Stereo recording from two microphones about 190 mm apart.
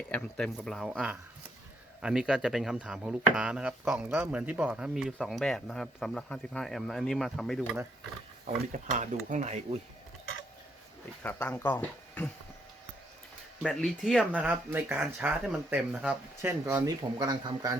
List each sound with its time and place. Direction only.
0.1 s speech: 5° left (ahead or behind)
8.4 s speech: 40° right (ahead or behind)
11.2 s speech: 10° left (ahead or behind)
13.6 s speech: centre (ahead or behind); by 17.7 s 20° right (ahead or behind)